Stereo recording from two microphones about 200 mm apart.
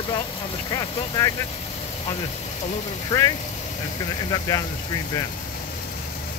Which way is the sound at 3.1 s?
15° left (ahead or behind).